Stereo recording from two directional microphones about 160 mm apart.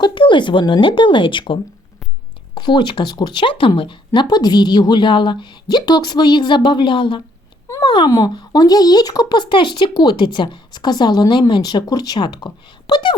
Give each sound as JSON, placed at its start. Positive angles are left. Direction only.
{"t": 0.0, "sound": "speech", "side_deg": 30}
{"t": 2.6, "sound": "speech", "side_deg": 30}